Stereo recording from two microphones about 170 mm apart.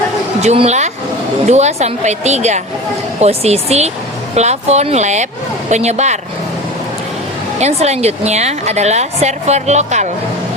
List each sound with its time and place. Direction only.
0.4 s a woman's voice: 40° right (ahead or behind)
7.6 s a woman's voice: 40° right (ahead or behind)